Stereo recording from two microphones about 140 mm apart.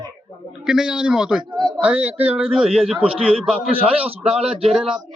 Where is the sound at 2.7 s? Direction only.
45° right (ahead or behind).